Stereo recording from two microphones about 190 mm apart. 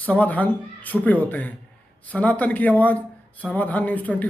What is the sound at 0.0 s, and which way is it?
Speech, 10° left (ahead or behind).